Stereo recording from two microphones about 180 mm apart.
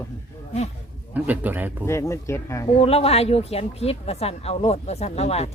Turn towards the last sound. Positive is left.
turn(degrees=35)  # may be behind; listen again after turning